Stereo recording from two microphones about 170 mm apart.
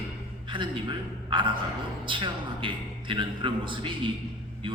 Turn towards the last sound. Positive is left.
turn(degrees=-30)  # may be behind; listen again after turning